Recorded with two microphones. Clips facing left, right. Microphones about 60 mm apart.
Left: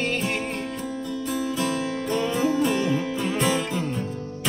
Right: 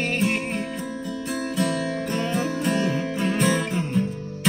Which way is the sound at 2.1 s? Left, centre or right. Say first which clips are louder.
Left 3 dB; right.